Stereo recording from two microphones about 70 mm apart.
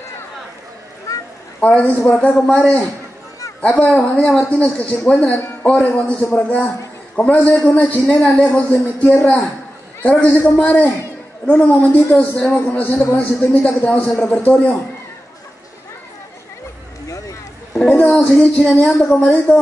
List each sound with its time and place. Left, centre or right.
1.1 s a sound: left
1.6 s a man's voice: left
3.6 s a man's voice: centre
17.7 s speech: centre